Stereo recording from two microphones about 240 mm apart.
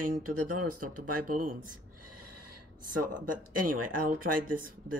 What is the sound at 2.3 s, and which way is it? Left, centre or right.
Speech, right.